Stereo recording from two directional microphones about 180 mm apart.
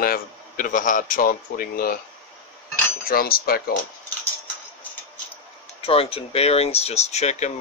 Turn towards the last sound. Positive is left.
turn(degrees=40)  # may be behind; listen again after turning